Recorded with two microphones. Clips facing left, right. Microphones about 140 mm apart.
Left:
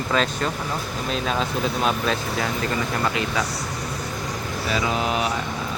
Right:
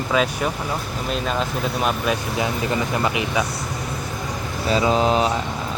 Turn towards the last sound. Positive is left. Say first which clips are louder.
# right 5 dB
turn(degrees=-30)  # may be behind; listen again after turning